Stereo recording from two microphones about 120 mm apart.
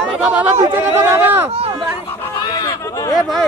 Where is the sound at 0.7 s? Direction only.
20° right (ahead or behind).